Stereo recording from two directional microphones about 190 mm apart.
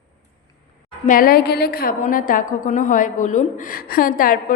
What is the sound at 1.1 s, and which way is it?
A woman's voice, 50° left (ahead or behind).